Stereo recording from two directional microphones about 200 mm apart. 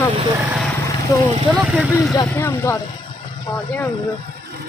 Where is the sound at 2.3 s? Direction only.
15° left (ahead or behind).